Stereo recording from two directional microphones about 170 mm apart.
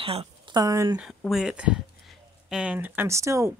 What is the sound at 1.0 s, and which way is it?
Speech, centre (ahead or behind).